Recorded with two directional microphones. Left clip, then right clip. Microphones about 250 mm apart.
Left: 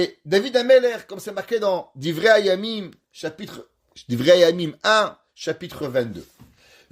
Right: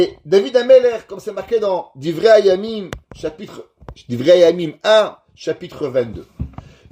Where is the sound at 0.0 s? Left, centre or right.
Left.